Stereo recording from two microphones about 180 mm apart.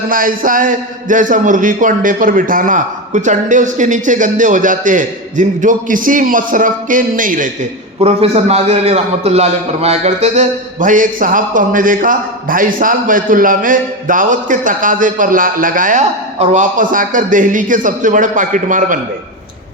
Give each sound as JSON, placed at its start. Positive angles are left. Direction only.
{"t": 0.1, "sound": "a man's voice", "side_deg": -50}
{"t": 7.9, "sound": "a man's voice", "side_deg": -35}